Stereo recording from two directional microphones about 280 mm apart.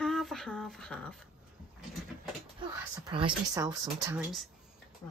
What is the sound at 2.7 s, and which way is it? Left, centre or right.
Speech, centre.